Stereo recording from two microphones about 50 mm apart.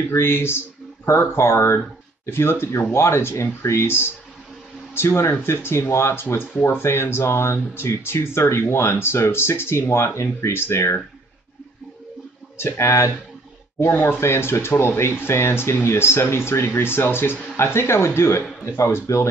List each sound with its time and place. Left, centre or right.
0.1 s speech: left
3.6 s speech: left
5.4 s speech: left
6.2 s speech: left
6.8 s speech: left
12.5 s speech: left
14.2 s speech: left
17.7 s speech: left